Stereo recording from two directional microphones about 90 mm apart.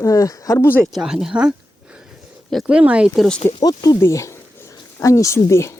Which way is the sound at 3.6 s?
45° left (ahead or behind).